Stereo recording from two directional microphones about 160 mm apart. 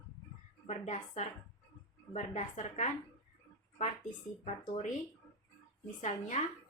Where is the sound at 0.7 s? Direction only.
45° left (ahead or behind).